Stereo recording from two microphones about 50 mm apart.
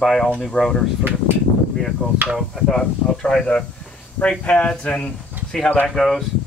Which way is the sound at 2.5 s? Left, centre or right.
Centre.